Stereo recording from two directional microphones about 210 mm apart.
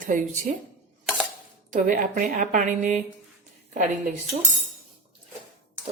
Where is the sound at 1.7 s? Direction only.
40° right (ahead or behind).